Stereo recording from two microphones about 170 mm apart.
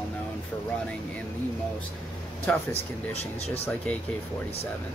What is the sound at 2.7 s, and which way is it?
Speech, 35° left (ahead or behind).